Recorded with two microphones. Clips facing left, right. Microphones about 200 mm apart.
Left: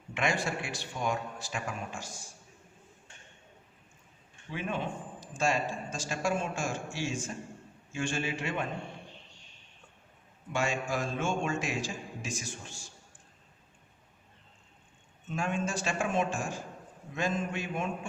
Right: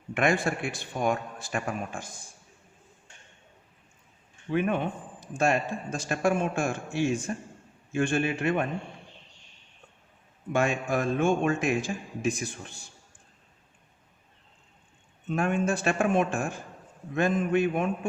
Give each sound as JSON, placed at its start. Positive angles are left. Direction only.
{"t": 0.1, "sound": "a man's voice", "side_deg": -55}
{"t": 4.5, "sound": "a man's voice", "side_deg": -60}
{"t": 10.5, "sound": "a man's voice", "side_deg": -55}
{"t": 15.3, "sound": "a man's voice", "side_deg": -60}